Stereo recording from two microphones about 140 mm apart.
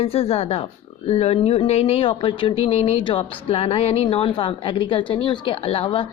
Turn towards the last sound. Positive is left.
turn(degrees=40)  # may be behind; listen again after turning